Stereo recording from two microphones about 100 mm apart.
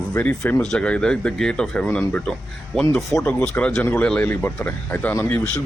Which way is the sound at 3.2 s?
15° left (ahead or behind).